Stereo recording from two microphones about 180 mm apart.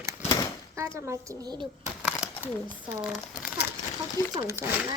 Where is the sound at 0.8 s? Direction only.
15° right (ahead or behind).